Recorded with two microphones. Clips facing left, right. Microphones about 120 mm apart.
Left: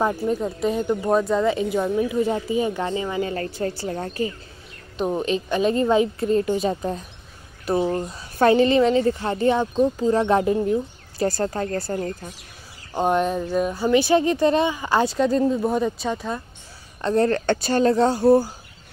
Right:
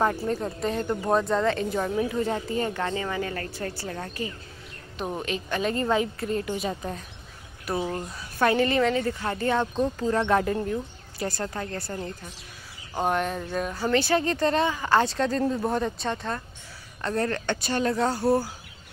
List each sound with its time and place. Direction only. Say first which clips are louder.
0.3 s speech: left 5 dB; 5° left (ahead or behind); by 4.3 s 30° left (ahead or behind)
4.9 s a woman's voice: left 7 dB; 20° left (ahead or behind)
9.6 s speech: left 5 dB; 10° left (ahead or behind)
10.0 s a woman's voice: left 3 dB; 20° left (ahead or behind)
11.1 s speech: left 8 dB; 35° left (ahead or behind)
12.9 s speech: left 5 dB; 20° left (ahead or behind)
17.0 s a woman's voice: left 7 dB; 25° left (ahead or behind)